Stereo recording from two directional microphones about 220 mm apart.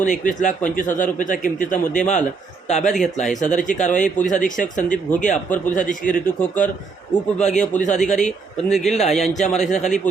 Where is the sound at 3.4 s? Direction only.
35° left (ahead or behind).